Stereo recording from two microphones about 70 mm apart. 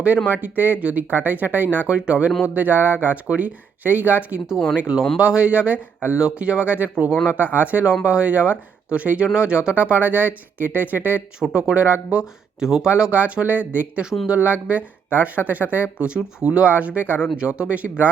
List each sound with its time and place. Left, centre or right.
0.3 s speech: right
11.3 s speech: centre
11.6 s speech: right
12.1 s speech: centre
12.9 s speech: centre